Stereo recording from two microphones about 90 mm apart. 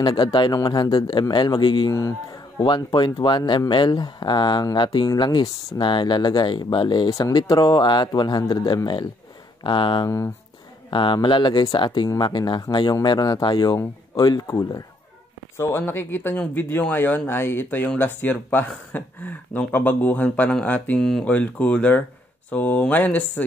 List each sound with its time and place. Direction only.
0.0 s speech: 55° left (ahead or behind)
0.6 s speech: 45° left (ahead or behind)
1.9 s speech: 40° left (ahead or behind)
2.6 s speech: 55° left (ahead or behind)
7.1 s speech: 40° left (ahead or behind)
9.6 s speech: 60° left (ahead or behind)
10.0 s speech: 35° left (ahead or behind)
10.9 s speech: 60° left (ahead or behind); by 14.8 s 45° left (ahead or behind)
15.5 s speech: 25° left (ahead or behind)